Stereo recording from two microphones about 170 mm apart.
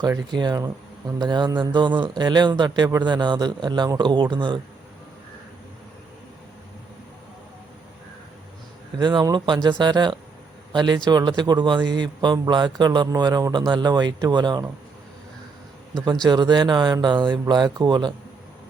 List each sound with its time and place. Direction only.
0.0 s speech: 25° right (ahead or behind)
9.0 s speech: 25° right (ahead or behind)
16.2 s speech: 25° right (ahead or behind)